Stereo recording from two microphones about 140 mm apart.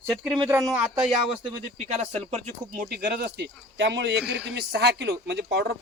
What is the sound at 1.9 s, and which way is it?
Speech, 55° right (ahead or behind).